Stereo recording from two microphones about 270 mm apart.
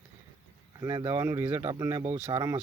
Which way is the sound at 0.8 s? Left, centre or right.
Centre.